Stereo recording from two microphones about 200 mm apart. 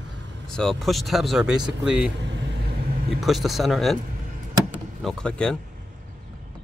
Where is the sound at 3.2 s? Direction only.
Centre (ahead or behind).